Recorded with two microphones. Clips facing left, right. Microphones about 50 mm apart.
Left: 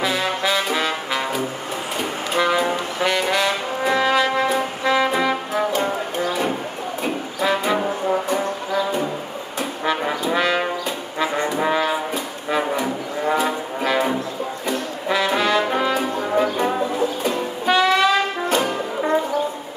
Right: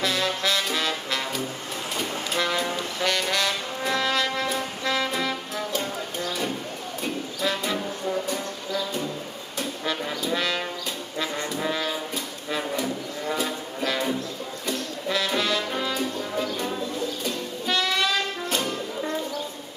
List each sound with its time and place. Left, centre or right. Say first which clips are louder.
0.0 s brass instrument: left 4 dB; centre
2.0 s music: left 5 dB; centre
7.8 s music: left 7 dB; left
9.6 s trombone: left 6 dB; centre
11.1 s brass instrument: left 8 dB; left
12.4 s music: left 6 dB; left
14.7 s brass instrument: left 4 dB; centre
16.3 s music: left 10 dB; left